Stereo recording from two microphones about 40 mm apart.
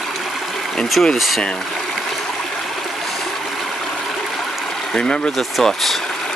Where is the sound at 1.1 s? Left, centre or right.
Centre.